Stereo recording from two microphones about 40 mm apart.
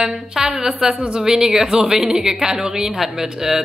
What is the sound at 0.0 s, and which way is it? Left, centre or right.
A woman's voice, centre.